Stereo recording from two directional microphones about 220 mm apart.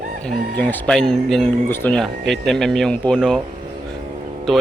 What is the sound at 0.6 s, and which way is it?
Speech, 5° left (ahead or behind).